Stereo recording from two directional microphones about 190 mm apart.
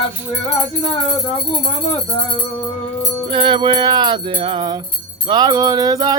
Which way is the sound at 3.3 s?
25° right (ahead or behind).